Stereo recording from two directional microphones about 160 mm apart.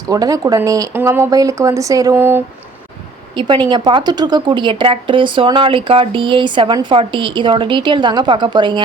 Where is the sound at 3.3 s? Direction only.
30° right (ahead or behind).